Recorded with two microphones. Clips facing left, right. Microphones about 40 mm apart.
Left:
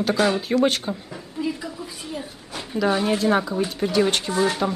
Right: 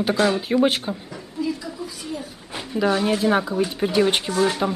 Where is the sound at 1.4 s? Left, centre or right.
Left.